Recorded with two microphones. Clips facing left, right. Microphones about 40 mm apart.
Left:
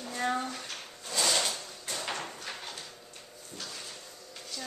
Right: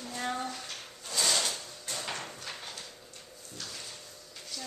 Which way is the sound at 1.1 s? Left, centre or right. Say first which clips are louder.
Left 1 dB; centre.